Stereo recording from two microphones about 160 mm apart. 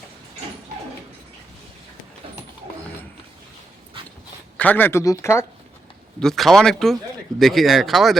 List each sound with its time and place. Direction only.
4.5 s a man's voice: 10° left (ahead or behind)
6.1 s speech: centre (ahead or behind)